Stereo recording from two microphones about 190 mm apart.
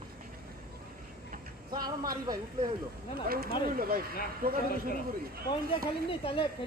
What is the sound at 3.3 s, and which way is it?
A man's voice, 50° right (ahead or behind).